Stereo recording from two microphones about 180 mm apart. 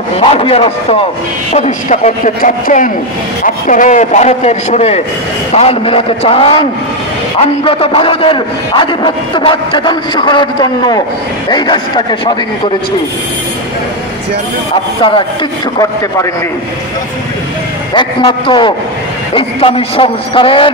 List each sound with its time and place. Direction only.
0.2 s a man's voice: 30° left (ahead or behind)
15.0 s a man's voice: 25° left (ahead or behind)
17.9 s a man's voice: 25° left (ahead or behind)